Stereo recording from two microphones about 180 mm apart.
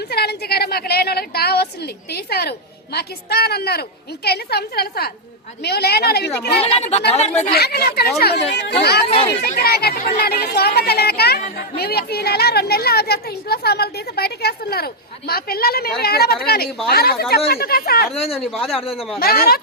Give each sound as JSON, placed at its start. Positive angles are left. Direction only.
{"t": 0.1, "sound": "speech", "side_deg": 60}
{"t": 6.6, "sound": "speech", "side_deg": 35}
{"t": 7.5, "sound": "speech", "side_deg": 60}
{"t": 9.0, "sound": "speech", "side_deg": 35}
{"t": 9.6, "sound": "speech", "side_deg": 60}
{"t": 18.1, "sound": "speech", "side_deg": 35}
{"t": 19.2, "sound": "speech", "side_deg": 55}